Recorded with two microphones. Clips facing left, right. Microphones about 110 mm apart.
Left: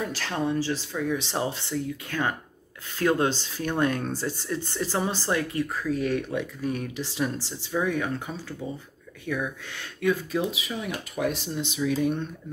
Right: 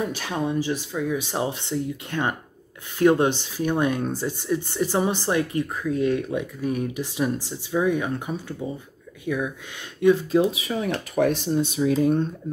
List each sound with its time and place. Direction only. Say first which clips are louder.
0.0 s speech: right 2 dB; 15° right (ahead or behind)
10.3 s speech: right 7 dB; 45° right (ahead or behind)